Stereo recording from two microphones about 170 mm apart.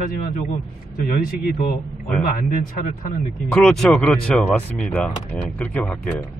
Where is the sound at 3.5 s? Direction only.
5° left (ahead or behind).